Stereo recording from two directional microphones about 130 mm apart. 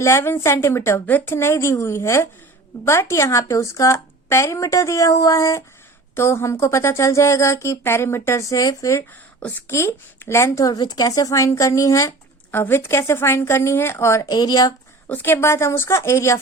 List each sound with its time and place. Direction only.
0.0 s speech: 20° left (ahead or behind)
15.1 s speech: 20° left (ahead or behind)